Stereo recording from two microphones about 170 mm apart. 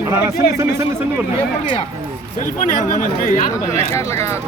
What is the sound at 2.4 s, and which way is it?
Speech, 50° left (ahead or behind).